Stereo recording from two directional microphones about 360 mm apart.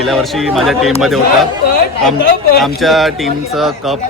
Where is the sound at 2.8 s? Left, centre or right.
Centre.